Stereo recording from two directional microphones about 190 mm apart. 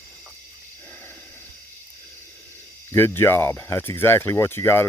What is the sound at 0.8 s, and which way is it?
Snort, 10° left (ahead or behind).